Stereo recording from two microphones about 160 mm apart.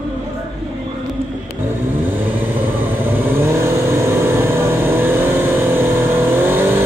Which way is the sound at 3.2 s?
15° right (ahead or behind).